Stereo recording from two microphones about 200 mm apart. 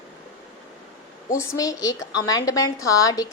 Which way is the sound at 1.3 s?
15° left (ahead or behind).